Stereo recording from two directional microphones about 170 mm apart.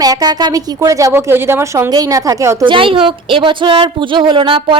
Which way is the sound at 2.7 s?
30° right (ahead or behind).